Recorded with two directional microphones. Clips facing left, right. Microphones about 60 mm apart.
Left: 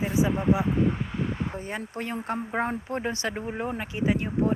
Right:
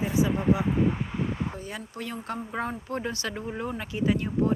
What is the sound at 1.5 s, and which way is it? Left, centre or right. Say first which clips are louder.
Speech: left 4 dB; left.